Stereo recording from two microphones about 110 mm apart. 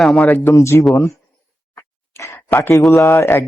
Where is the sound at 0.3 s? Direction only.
25° left (ahead or behind).